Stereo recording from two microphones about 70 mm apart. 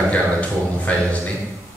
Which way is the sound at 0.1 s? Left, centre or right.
Centre.